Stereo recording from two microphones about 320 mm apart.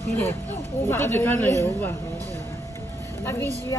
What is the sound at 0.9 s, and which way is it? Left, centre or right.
Speech, centre.